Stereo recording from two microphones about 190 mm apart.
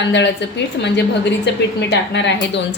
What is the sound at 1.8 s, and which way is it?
Speech, 65° left (ahead or behind).